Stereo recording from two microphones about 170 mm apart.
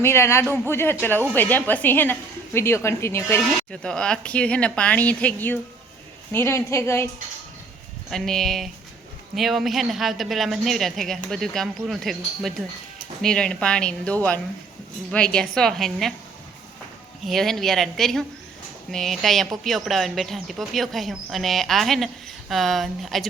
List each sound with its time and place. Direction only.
0.0 s a woman's voice: 15° left (ahead or behind)
8.1 s speech: centre (ahead or behind)
17.2 s speech: centre (ahead or behind)